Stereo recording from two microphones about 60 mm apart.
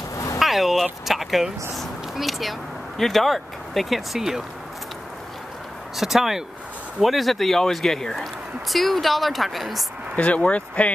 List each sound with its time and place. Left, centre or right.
0.4 s vehicle: centre
1.0 s speech: centre
5.9 s speech: centre
10.1 s speech: left